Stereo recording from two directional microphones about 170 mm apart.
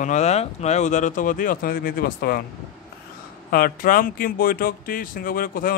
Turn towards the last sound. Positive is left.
turn(degrees=55)  # may be behind; listen again after turning